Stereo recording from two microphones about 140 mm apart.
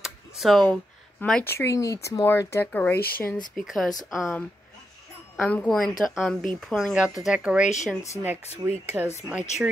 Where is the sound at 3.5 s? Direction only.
Centre (ahead or behind).